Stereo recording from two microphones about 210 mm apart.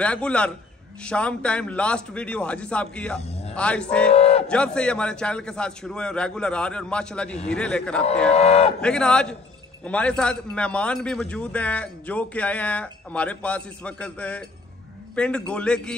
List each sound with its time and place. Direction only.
0.0 s a man's voice: 5° left (ahead or behind)
4.1 s a sound: 30° left (ahead or behind)
4.5 s a man's voice: 5° left (ahead or behind)
8.3 s speech: 30° left (ahead or behind)
8.8 s a man's voice: 5° left (ahead or behind)